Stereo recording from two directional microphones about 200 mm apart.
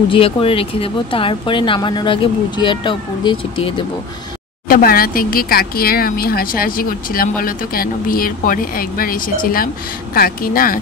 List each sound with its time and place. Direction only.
0.1 s speech: 25° left (ahead or behind)
4.6 s speech: 45° left (ahead or behind)